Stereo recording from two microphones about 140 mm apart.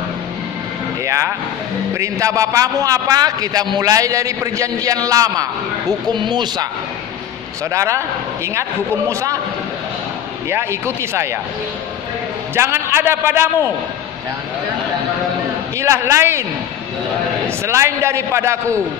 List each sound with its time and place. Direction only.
1.0 s a man's voice: 20° right (ahead or behind)
7.7 s a man's voice: 20° right (ahead or behind)
10.5 s a man's voice: 20° right (ahead or behind)
12.5 s a man's voice: 20° right (ahead or behind)
15.8 s a man's voice: 20° right (ahead or behind)
17.6 s a man's voice: 20° right (ahead or behind)